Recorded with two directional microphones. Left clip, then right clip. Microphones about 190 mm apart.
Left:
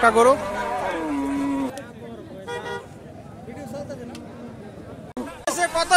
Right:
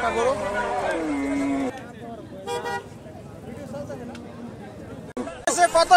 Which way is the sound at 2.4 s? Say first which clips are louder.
Right 3 dB; 60° right (ahead or behind).